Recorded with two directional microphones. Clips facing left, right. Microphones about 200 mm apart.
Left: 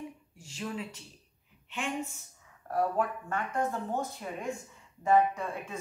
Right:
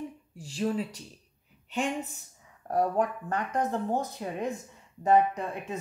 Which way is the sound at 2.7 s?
35° right (ahead or behind).